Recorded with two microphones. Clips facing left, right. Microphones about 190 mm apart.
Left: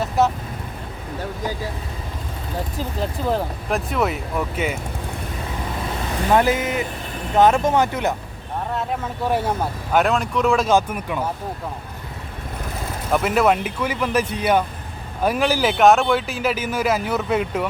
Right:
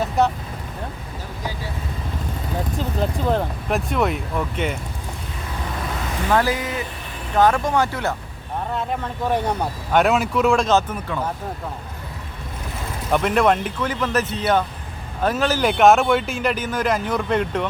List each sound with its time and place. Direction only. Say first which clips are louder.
0.2 s speech: left 1 dB; centre (ahead or behind)
3.0 s speech: right 1 dB; centre (ahead or behind)
6.3 s speech: left 3 dB; 20° left (ahead or behind)
8.7 s speech: even; 5° left (ahead or behind)
13.1 s speech: even; 5° left (ahead or behind)